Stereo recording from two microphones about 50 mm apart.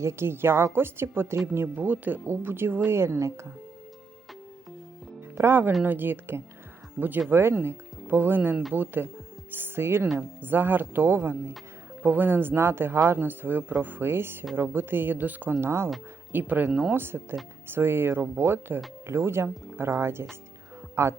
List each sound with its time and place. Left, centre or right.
0.0 s speech: right
1.6 s speech: right
3.0 s speech: right
5.5 s speech: right
10.2 s speech: right
12.0 s speech: right
13.7 s speech: right
14.0 s speech: right
15.6 s speech: right
16.3 s speech: right
16.6 s speech: centre
16.9 s speech: right
19.0 s speech: right